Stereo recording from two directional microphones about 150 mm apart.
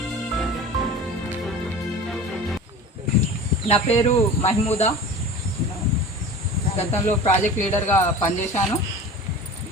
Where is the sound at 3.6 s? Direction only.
40° left (ahead or behind).